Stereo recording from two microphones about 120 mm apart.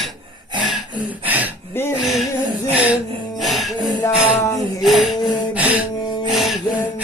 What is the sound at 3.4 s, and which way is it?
Music, centre (ahead or behind).